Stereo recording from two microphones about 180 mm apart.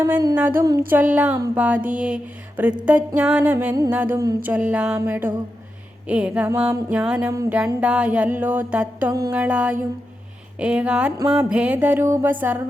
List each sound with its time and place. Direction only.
0.0 s a sound: 20° right (ahead or behind)
0.3 s music: 10° right (ahead or behind)
10.6 s speech: 5° right (ahead or behind)
11.3 s music: 5° right (ahead or behind)